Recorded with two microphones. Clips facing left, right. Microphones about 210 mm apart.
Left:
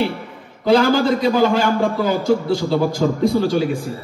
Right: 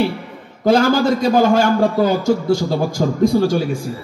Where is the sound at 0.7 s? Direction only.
45° right (ahead or behind).